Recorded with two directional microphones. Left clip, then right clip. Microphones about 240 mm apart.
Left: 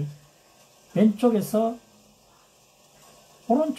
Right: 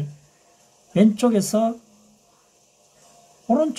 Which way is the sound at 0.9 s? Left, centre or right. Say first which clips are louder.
Right 2 dB; right.